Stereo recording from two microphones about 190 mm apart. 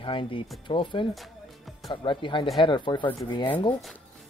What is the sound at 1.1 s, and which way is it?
Music, centre (ahead or behind).